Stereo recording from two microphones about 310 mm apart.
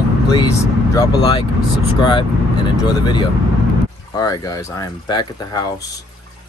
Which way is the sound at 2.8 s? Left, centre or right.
Centre.